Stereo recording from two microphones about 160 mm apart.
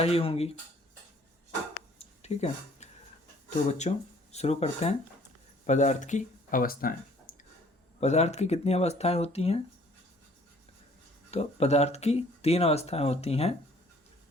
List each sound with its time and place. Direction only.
0.0 s speech: 40° left (ahead or behind)
2.0 s a sound: 45° left (ahead or behind)
3.7 s speech: 45° left (ahead or behind); by 7.3 s 65° left (ahead or behind)
8.0 s speech: 45° left (ahead or behind)
11.3 s speech: 40° left (ahead or behind)